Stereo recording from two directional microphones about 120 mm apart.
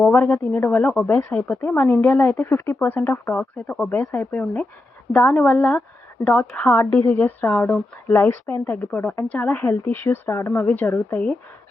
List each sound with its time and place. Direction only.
0.0 s a woman's voice: 10° left (ahead or behind)